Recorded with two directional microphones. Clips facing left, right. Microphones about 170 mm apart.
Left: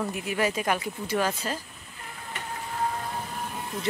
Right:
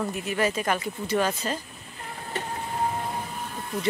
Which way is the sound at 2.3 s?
30° right (ahead or behind).